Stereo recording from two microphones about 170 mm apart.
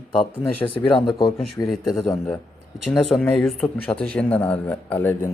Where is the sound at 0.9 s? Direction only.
25° left (ahead or behind).